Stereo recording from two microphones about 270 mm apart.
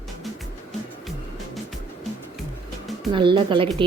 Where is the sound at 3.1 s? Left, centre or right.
Centre.